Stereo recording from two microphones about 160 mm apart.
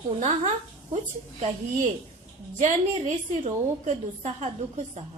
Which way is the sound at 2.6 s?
40° right (ahead or behind).